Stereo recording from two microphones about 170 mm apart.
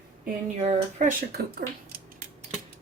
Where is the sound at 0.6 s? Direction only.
55° right (ahead or behind).